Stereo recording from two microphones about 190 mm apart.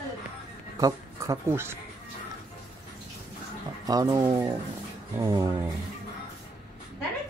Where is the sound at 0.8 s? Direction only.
20° right (ahead or behind).